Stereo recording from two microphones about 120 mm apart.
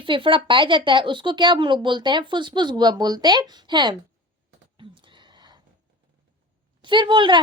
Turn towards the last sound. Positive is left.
turn(degrees=-40)  # may be behind; listen again after turning